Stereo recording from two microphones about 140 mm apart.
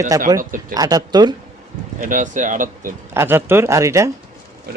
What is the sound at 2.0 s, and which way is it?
Speech, 70° right (ahead or behind).